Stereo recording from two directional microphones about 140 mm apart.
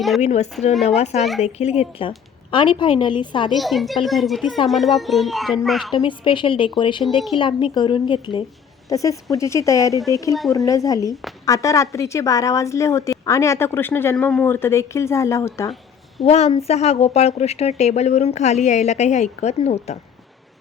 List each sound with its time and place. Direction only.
0.2 s a woman's voice: 50° left (ahead or behind); by 3.5 s 35° left (ahead or behind)
3.5 s a child's voice: centre (ahead or behind)
5.9 s a woman's voice: 35° left (ahead or behind)
8.9 s a woman's voice: 25° left (ahead or behind)
11.1 s a child's voice: centre (ahead or behind)
11.4 s a woman's voice: 20° left (ahead or behind)
16.2 s speech: 50° left (ahead or behind)